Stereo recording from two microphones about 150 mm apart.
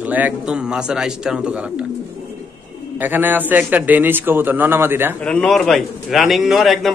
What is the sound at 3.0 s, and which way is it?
A man's voice, 10° right (ahead or behind).